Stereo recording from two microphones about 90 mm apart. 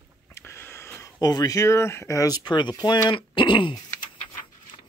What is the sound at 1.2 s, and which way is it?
Speech, 45° left (ahead or behind).